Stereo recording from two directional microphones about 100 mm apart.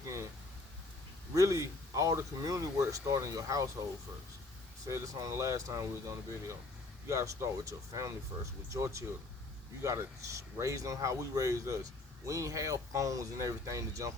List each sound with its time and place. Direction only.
1.3 s speech: 35° right (ahead or behind)
4.9 s speech: 35° right (ahead or behind)